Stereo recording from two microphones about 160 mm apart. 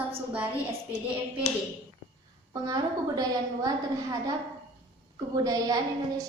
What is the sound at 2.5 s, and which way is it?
A woman's voice, 25° right (ahead or behind).